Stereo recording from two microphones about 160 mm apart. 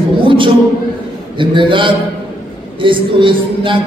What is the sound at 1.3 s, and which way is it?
A man's voice, 30° right (ahead or behind).